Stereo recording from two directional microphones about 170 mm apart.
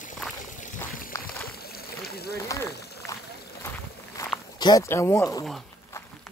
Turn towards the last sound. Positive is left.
turn(degrees=20)  # may be behind; listen again after turning